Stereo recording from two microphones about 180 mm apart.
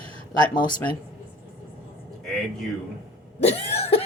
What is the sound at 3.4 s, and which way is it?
Speech, 35° left (ahead or behind).